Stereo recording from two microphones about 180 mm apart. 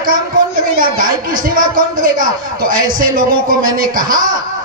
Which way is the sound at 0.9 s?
50° right (ahead or behind).